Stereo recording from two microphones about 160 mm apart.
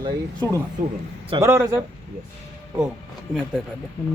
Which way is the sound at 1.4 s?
15° right (ahead or behind).